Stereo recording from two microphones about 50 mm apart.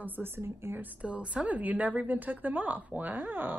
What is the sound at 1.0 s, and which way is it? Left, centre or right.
A woman's voice, right.